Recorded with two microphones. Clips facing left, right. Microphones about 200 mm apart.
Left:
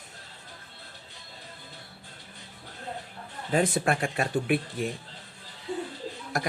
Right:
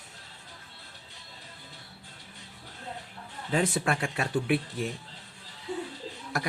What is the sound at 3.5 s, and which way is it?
Speech, 45° left (ahead or behind).